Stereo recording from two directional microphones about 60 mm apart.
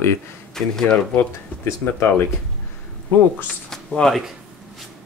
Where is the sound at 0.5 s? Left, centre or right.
Centre.